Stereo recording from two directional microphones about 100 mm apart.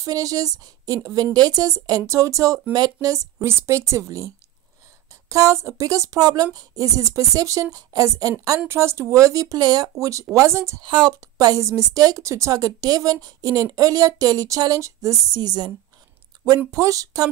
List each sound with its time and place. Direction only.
0.0 s a woman's voice: 35° right (ahead or behind)
3.3 s a woman's voice: 25° right (ahead or behind)
5.3 s a woman's voice: 30° right (ahead or behind)
10.8 s speech: 50° right (ahead or behind)
11.1 s a woman's voice: 35° right (ahead or behind)